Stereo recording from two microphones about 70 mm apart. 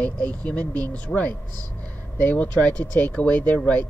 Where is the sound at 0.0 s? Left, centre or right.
Centre.